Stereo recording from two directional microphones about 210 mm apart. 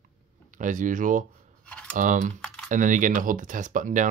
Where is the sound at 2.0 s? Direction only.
35° right (ahead or behind).